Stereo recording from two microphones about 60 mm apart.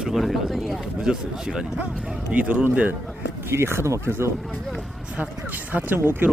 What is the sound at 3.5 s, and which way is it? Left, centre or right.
Speech, right.